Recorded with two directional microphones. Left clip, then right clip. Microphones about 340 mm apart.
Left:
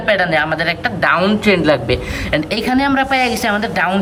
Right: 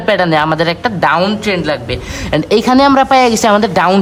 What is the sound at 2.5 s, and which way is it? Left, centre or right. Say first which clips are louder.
A woman's voice: right 10 dB; centre.